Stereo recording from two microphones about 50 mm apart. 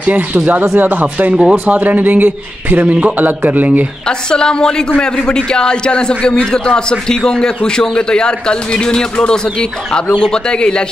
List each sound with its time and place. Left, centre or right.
0.0 s a man's voice: right
1.3 s speech: centre
1.7 s a man's voice: right
4.3 s a man's voice: centre